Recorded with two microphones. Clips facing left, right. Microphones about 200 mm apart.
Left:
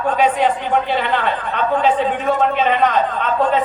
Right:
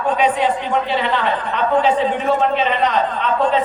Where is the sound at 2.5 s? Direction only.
50° left (ahead or behind).